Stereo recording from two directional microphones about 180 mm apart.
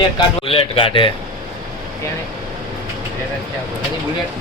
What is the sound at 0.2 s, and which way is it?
Speech, 30° left (ahead or behind).